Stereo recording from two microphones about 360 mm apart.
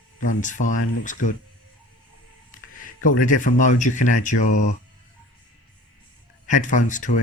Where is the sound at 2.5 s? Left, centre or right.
Left.